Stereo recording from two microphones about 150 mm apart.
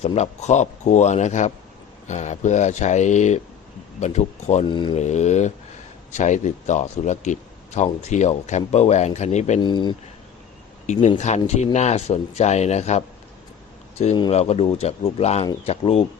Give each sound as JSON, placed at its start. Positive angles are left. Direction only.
{"t": 0.0, "sound": "speech", "side_deg": 45}
{"t": 4.6, "sound": "speech", "side_deg": 30}
{"t": 4.9, "sound": "speech", "side_deg": 50}
{"t": 9.6, "sound": "speech", "side_deg": 30}
{"t": 11.2, "sound": "speech", "side_deg": 50}
{"t": 14.3, "sound": "speech", "side_deg": 45}